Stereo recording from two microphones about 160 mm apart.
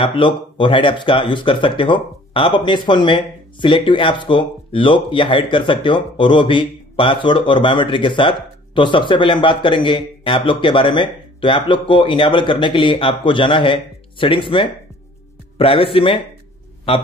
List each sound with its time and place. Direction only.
0.0 s speech: 30° left (ahead or behind)